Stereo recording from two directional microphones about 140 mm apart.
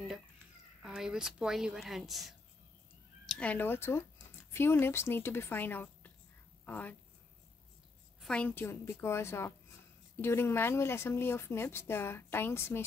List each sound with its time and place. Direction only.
0.8 s a woman's voice: 5° right (ahead or behind); by 7.0 s 10° left (ahead or behind)
8.2 s speech: 5° left (ahead or behind)